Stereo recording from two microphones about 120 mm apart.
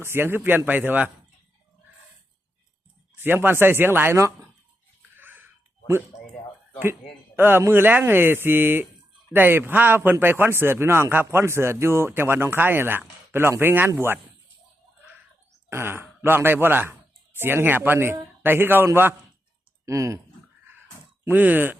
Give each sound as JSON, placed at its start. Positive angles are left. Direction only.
{"t": 0.0, "sound": "speech", "side_deg": -20}
{"t": 3.2, "sound": "speech", "side_deg": -15}
{"t": 5.1, "sound": "a sound", "side_deg": -15}
{"t": 7.3, "sound": "a man's voice", "side_deg": -20}
{"t": 15.7, "sound": "speech", "side_deg": -20}
{"t": 21.2, "sound": "speech", "side_deg": -15}